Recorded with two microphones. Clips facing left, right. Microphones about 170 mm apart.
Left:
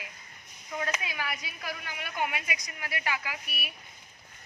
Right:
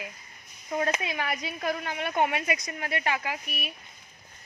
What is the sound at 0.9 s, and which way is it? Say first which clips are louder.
Speech: right 5 dB; 25° right (ahead or behind).